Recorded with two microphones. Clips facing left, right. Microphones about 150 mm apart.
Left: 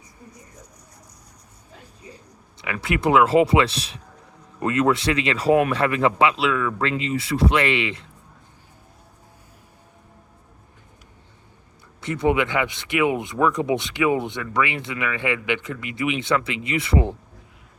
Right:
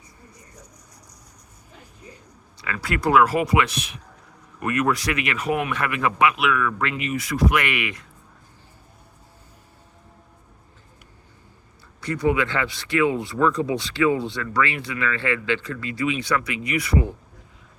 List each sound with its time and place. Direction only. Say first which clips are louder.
2.6 s speech: left 2 dB; 20° left (ahead or behind)
11.9 s speech: left 1 dB; 25° left (ahead or behind)